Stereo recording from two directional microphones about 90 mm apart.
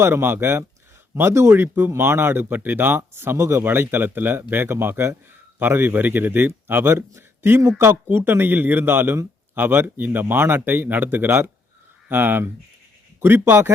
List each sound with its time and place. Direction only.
0.0 s a man's voice: 25° right (ahead or behind)